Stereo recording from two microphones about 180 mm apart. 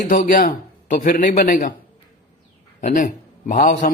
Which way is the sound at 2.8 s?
45° left (ahead or behind).